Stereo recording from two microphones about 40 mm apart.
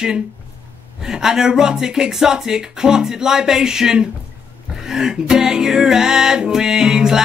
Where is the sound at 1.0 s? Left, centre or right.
Centre.